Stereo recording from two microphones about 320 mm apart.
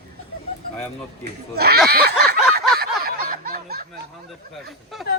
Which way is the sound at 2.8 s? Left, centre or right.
Right.